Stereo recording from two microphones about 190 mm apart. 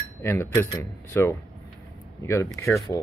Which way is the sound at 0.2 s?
10° left (ahead or behind).